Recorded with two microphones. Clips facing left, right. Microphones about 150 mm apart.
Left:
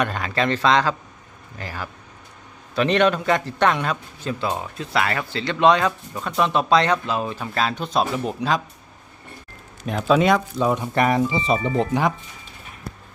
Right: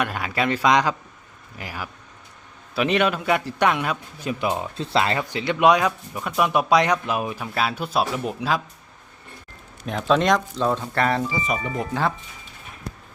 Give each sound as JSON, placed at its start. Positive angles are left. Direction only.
{"t": 0.0, "sound": "speech", "side_deg": -5}
{"t": 9.8, "sound": "speech", "side_deg": 5}